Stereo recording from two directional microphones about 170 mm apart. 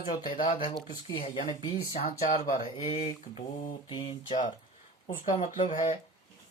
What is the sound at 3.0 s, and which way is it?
Mantra, 45° left (ahead or behind).